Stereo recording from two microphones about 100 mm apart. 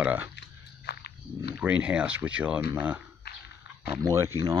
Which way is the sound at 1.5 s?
10° right (ahead or behind).